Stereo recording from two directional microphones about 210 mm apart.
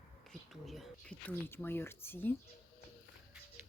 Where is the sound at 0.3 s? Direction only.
Centre (ahead or behind).